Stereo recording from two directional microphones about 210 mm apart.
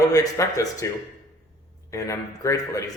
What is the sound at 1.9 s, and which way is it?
Speech, 15° left (ahead or behind).